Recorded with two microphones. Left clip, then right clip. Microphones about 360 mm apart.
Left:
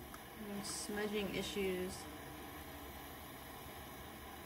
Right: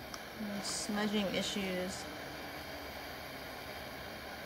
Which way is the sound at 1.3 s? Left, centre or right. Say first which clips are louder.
Right 4 dB; centre.